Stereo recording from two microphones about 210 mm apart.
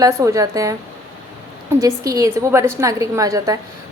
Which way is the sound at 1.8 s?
15° right (ahead or behind).